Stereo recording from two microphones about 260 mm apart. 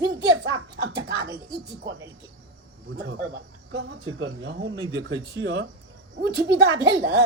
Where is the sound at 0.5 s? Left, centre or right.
Right.